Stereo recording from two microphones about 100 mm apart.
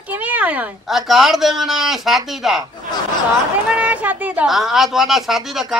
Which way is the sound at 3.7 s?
15° right (ahead or behind).